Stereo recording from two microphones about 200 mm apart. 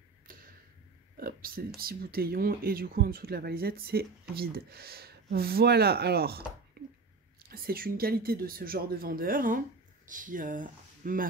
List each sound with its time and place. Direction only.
0.3 s tick-tock: 45° right (ahead or behind)
1.1 s a sound: 45° right (ahead or behind)
1.8 s speech: 50° right (ahead or behind)